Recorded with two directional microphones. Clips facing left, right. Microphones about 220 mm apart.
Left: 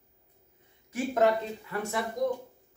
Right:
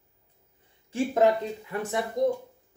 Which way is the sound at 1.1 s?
15° right (ahead or behind).